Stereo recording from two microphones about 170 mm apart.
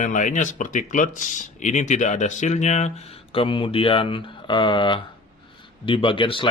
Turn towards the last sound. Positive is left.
turn(degrees=30)  # may be behind; listen again after turning